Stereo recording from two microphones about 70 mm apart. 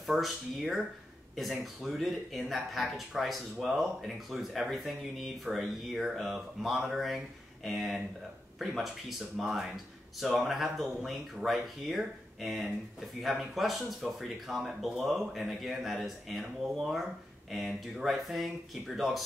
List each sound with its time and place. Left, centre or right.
0.0 s speech: centre